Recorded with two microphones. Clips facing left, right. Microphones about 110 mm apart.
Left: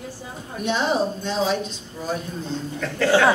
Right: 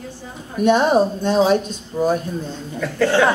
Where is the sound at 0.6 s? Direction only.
50° right (ahead or behind).